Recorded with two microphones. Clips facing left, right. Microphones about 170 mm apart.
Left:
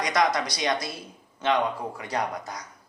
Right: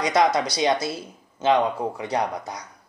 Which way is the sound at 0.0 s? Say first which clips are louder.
Right 4 dB; 25° right (ahead or behind).